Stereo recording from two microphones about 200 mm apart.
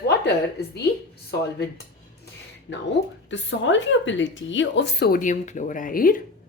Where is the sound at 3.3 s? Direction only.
65° left (ahead or behind).